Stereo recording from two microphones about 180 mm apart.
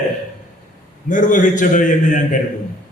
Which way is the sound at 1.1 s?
45° left (ahead or behind).